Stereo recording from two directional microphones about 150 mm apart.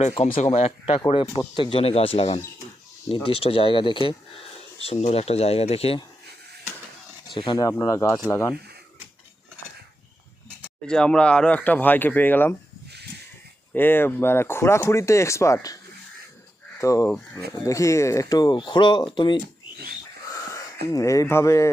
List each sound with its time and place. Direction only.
0.5 s speech: 40° left (ahead or behind)
7.3 s speech: 30° left (ahead or behind)
10.8 s speech: 5° left (ahead or behind)
13.7 s speech: 15° left (ahead or behind)
16.8 s speech: 20° left (ahead or behind)
20.8 s speech: 20° left (ahead or behind)